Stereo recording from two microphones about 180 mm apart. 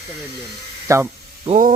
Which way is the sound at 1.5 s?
45° right (ahead or behind).